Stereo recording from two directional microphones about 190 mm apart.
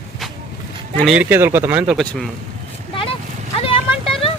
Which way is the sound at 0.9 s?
Centre (ahead or behind).